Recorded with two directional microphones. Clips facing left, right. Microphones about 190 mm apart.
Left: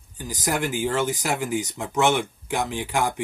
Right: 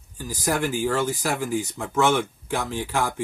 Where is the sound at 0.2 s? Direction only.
20° left (ahead or behind).